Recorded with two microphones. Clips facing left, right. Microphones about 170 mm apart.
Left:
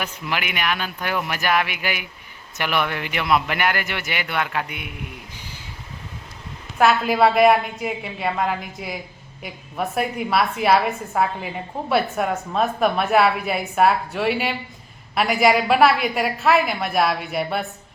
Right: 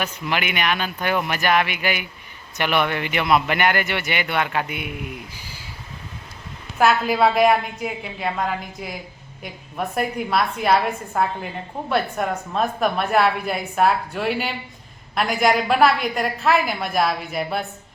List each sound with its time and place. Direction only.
0.0 s a woman's voice: 5° left (ahead or behind)
5.4 s a sound: 5° right (ahead or behind)
6.7 s a woman's voice: centre (ahead or behind)